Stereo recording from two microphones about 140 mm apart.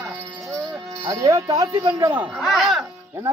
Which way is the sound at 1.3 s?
25° right (ahead or behind).